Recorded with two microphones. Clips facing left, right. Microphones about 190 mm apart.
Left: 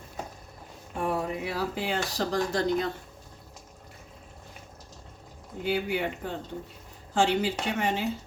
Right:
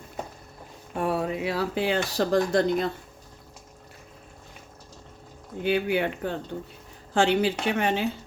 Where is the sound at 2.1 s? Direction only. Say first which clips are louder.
Right 6 dB; 55° right (ahead or behind).